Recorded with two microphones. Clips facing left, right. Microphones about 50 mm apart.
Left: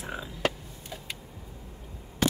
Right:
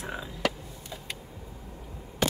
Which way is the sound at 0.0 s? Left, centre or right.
Centre.